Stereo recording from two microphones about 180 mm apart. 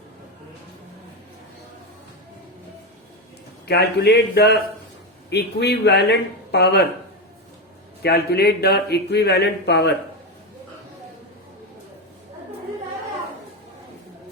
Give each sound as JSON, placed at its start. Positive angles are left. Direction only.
{"t": 3.7, "sound": "a man's voice", "side_deg": 65}
{"t": 8.0, "sound": "speech", "side_deg": 60}